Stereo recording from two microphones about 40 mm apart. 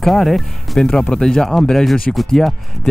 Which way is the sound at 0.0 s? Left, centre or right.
Centre.